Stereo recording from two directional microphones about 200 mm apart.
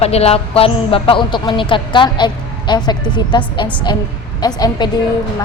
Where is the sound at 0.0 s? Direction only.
30° left (ahead or behind).